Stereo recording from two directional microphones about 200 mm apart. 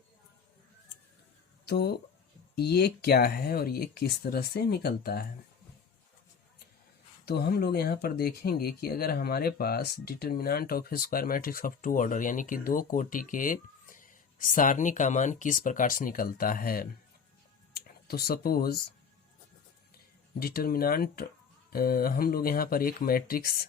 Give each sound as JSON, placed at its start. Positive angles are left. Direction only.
{"t": 1.6, "sound": "speech", "side_deg": 55}
{"t": 7.3, "sound": "speech", "side_deg": 55}
{"t": 20.4, "sound": "speech", "side_deg": 50}